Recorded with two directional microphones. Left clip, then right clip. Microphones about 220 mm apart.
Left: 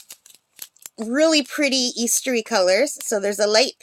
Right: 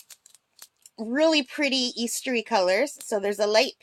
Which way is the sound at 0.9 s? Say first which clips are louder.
Left 4 dB; 15° left (ahead or behind).